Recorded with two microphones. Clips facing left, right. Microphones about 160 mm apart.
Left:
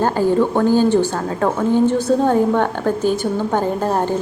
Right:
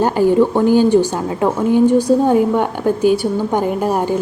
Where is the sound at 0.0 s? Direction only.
15° right (ahead or behind).